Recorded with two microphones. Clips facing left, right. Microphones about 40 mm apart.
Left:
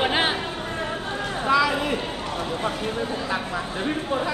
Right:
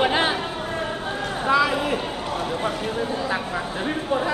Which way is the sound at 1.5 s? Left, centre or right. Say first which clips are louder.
Right 1 dB; centre.